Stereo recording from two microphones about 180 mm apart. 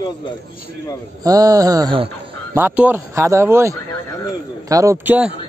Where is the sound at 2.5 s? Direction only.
10° right (ahead or behind).